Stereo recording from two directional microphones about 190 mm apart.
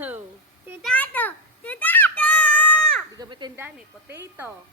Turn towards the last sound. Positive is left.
turn(degrees=-10)  # may be behind; listen again after turning